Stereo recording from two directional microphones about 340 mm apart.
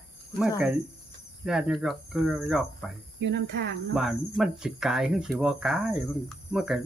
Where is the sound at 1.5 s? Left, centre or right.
Centre.